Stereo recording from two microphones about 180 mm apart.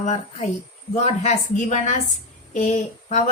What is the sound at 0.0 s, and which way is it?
A woman's voice, 40° left (ahead or behind).